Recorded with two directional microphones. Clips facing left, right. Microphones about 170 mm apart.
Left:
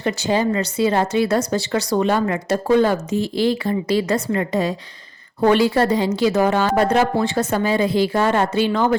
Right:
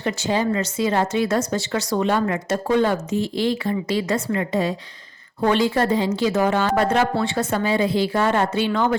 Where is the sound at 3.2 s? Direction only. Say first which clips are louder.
Left 3 dB; 10° left (ahead or behind).